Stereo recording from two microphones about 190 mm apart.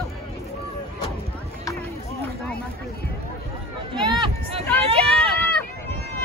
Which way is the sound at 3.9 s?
25° right (ahead or behind).